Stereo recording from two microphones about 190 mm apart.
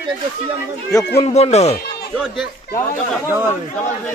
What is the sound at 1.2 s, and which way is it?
Speech, 35° left (ahead or behind).